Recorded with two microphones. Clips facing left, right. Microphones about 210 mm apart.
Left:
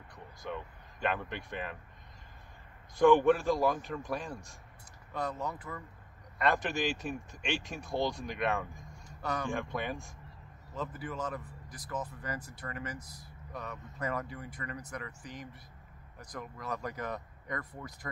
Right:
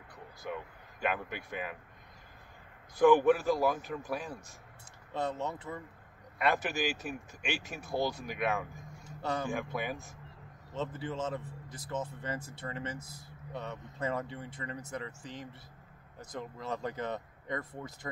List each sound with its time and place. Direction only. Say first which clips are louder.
0.4 s speech: even; 10° right (ahead or behind)
3.0 s speech: even; 5° right (ahead or behind)
5.1 s speech: right 2 dB; 25° right (ahead or behind)
6.3 s speech: even; 5° right (ahead or behind)
9.0 s a sound: right 1 dB; 25° right (ahead or behind)
9.5 s speech: even; 5° right (ahead or behind)
10.7 s speech: right 2 dB; 25° right (ahead or behind)